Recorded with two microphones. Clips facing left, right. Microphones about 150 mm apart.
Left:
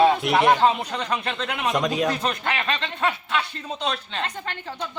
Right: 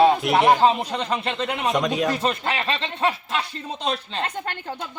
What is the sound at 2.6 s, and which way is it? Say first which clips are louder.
A woman's voice: right 2 dB; 30° right (ahead or behind).